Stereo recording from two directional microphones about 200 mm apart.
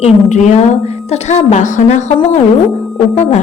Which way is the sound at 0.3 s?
35° left (ahead or behind).